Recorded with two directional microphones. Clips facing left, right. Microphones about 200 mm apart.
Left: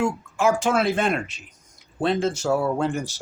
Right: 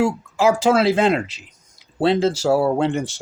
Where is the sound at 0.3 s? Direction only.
90° right.